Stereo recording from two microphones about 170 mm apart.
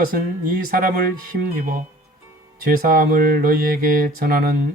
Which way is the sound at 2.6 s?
55° right (ahead or behind).